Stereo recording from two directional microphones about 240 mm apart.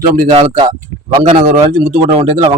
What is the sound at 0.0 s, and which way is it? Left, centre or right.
Speech, right.